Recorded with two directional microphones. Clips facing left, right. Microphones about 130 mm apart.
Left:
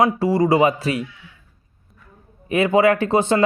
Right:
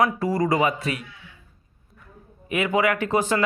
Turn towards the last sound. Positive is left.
turn(degrees=30)  # may be behind; listen again after turning